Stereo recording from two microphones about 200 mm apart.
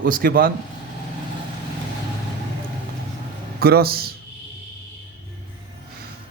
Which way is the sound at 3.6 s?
50° right (ahead or behind).